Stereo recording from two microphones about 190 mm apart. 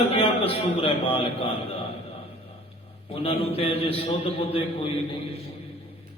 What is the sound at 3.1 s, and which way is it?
A man's voice, 30° left (ahead or behind).